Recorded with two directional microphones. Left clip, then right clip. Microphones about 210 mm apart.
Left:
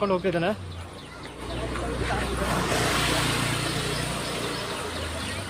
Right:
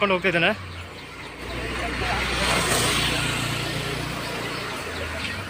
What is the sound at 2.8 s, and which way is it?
Vehicle, 40° right (ahead or behind).